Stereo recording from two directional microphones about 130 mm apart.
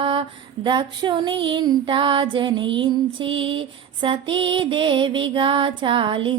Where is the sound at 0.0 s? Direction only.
40° right (ahead or behind).